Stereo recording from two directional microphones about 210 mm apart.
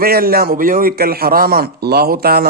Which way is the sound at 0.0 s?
45° right (ahead or behind).